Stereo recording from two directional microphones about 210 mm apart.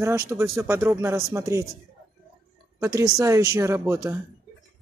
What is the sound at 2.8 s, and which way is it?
Speech, 15° right (ahead or behind).